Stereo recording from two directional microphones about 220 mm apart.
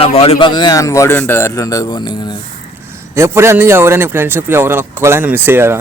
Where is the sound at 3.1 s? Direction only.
10° right (ahead or behind).